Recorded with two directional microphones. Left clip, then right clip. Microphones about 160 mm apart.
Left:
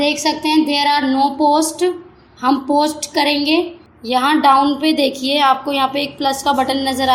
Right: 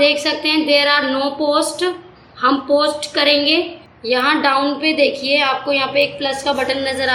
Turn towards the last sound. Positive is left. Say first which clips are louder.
# left 2 dB
turn(degrees=50)  # may be behind; listen again after turning